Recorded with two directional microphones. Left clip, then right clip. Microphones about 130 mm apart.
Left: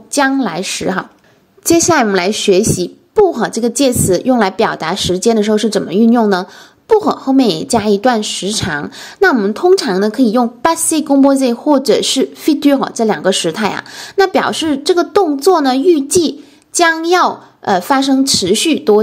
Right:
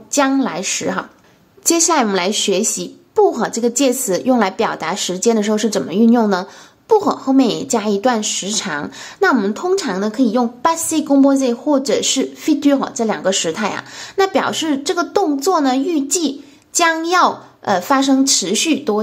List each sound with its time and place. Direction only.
0.1 s a woman's voice: 30° left (ahead or behind)